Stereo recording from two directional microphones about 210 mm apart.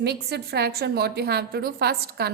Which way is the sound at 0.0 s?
50° right (ahead or behind).